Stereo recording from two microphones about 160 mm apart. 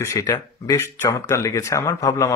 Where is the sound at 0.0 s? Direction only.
20° left (ahead or behind).